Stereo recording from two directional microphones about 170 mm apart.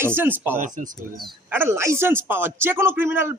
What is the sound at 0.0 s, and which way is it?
Speech, 10° right (ahead or behind).